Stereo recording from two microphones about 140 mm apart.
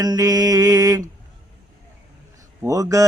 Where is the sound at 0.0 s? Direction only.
25° right (ahead or behind).